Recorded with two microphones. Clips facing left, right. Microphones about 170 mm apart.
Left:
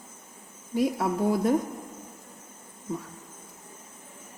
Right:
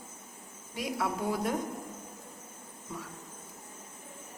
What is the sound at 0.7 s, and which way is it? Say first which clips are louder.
Speech: left 8 dB; 45° left (ahead or behind).